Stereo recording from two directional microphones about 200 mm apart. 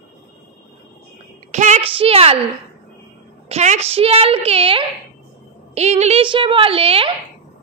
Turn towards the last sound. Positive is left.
turn(degrees=-30)  # may be behind; listen again after turning